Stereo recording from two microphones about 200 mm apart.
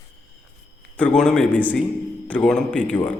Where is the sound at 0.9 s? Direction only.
5° left (ahead or behind).